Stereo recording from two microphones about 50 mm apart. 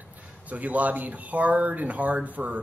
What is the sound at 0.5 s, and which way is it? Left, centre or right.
Speech, right.